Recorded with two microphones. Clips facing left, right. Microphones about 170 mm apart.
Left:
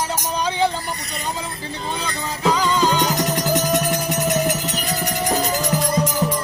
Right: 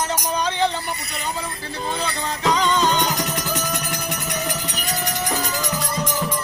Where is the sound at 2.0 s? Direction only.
5° left (ahead or behind).